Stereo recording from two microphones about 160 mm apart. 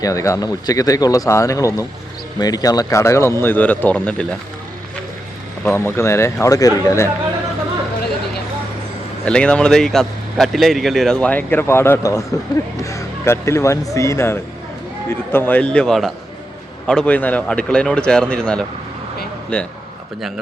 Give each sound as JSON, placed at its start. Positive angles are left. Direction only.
{"t": 0.0, "sound": "speech", "side_deg": 20}
{"t": 5.6, "sound": "speech", "side_deg": 15}
{"t": 9.2, "sound": "speech", "side_deg": 5}